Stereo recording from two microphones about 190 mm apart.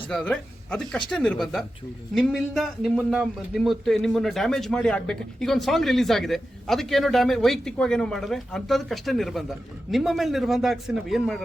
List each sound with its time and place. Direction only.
0.1 s a man's voice: 5° left (ahead or behind)